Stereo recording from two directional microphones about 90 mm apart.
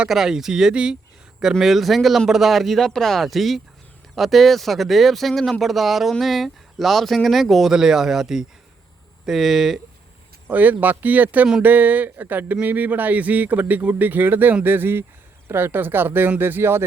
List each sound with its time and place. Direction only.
0.0 s speech: 5° right (ahead or behind)
10.5 s speech: 20° right (ahead or behind)